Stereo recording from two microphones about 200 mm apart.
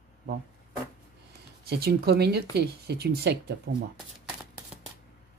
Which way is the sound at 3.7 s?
65° right (ahead or behind).